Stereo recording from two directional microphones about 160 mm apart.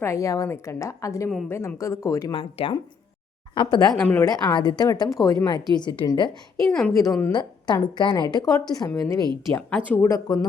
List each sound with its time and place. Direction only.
0.0 s a woman's voice: 20° left (ahead or behind)
2.3 s a woman's voice: 35° left (ahead or behind)
3.9 s speech: 10° left (ahead or behind)
4.4 s a woman's voice: 25° left (ahead or behind)
6.7 s speech: 5° left (ahead or behind)
7.0 s a woman's voice: 20° left (ahead or behind)
9.1 s speech: 30° right (ahead or behind)
9.5 s speech: 10° left (ahead or behind)